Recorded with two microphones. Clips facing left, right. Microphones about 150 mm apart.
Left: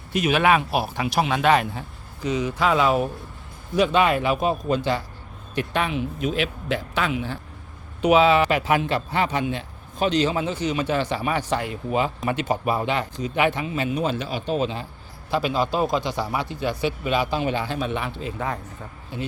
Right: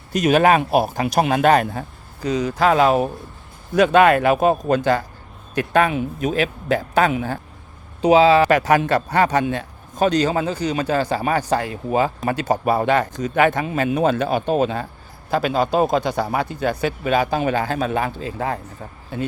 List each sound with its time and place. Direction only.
0.1 s a man's voice: 45° right (ahead or behind)
8.0 s speech: 30° right (ahead or behind)
8.4 s a man's voice: 45° right (ahead or behind)
12.8 s a man's voice: 45° right (ahead or behind)